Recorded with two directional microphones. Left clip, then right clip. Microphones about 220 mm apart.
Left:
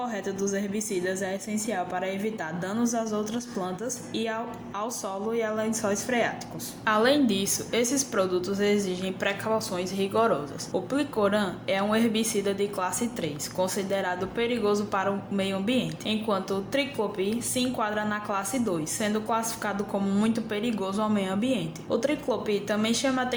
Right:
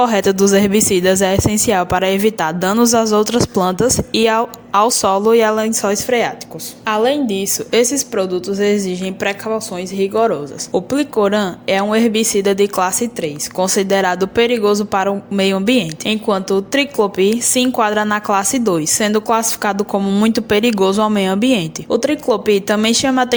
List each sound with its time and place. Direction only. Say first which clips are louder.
0.0 s a woman's voice: right 18 dB; 50° right (ahead or behind)
7.1 s a woman's voice: right 7 dB; 25° right (ahead or behind); by 23.3 s 40° right (ahead or behind)